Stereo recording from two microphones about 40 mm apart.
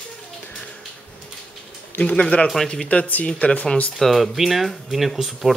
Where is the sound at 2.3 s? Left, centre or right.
Left.